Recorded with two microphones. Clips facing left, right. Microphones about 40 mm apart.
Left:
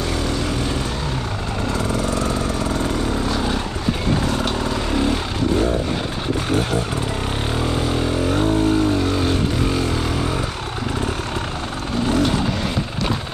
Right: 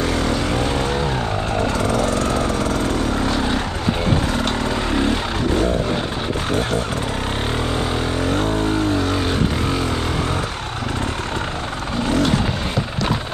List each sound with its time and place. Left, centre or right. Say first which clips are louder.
4.3 s vehicle: right 1 dB; centre
8.3 s vehicle: left 1 dB; centre
12.1 s vehicle: right 1 dB; centre